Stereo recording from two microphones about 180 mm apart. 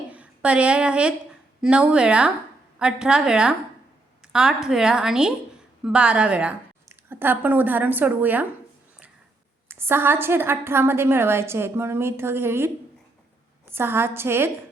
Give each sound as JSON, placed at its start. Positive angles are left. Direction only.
{"t": 0.1, "sound": "a woman's voice", "side_deg": -5}
{"t": 9.6, "sound": "a woman's voice", "side_deg": -15}